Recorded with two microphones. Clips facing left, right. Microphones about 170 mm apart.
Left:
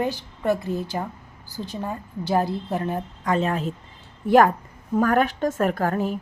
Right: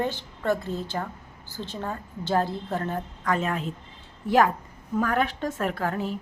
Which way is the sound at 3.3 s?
35° left (ahead or behind).